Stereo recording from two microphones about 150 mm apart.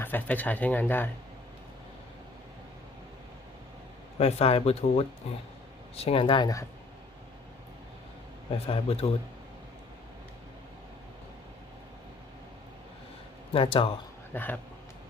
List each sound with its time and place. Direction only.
0.0 s speech: 10° left (ahead or behind)
4.2 s speech: 45° left (ahead or behind); by 6.7 s 25° left (ahead or behind)
8.4 s speech: 40° left (ahead or behind)
13.5 s speech: 40° left (ahead or behind)
14.3 s speech: 10° left (ahead or behind)